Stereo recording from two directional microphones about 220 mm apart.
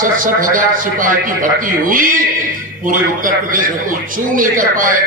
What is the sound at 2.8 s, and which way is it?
A man's voice, 40° right (ahead or behind).